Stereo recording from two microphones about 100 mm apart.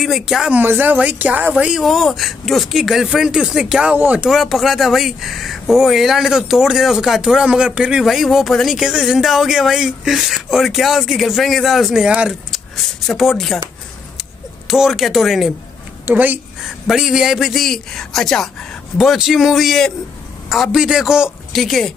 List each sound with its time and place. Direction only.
0.0 s speech: centre (ahead or behind)
0.5 s speech: 20° right (ahead or behind)
4.3 s speech: centre (ahead or behind)
12.4 s speech: centre (ahead or behind)
14.7 s speech: centre (ahead or behind)
16.1 s speech: 15° right (ahead or behind)
16.6 s speech: centre (ahead or behind)